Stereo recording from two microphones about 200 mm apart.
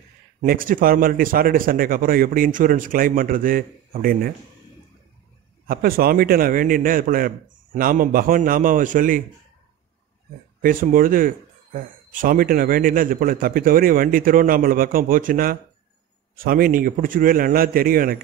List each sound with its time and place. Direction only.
0.4 s speech: 45° right (ahead or behind)
5.7 s speech: 45° right (ahead or behind)
10.6 s speech: 45° right (ahead or behind)